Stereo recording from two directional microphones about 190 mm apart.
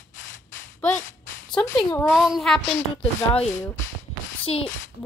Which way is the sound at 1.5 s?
5° left (ahead or behind).